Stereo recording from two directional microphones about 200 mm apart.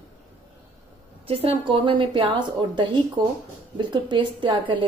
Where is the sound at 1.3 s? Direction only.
30° right (ahead or behind).